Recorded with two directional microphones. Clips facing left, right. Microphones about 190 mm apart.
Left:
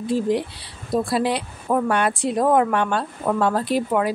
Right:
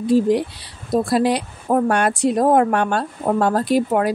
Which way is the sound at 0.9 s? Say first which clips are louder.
Right 4 dB; 45° right (ahead or behind).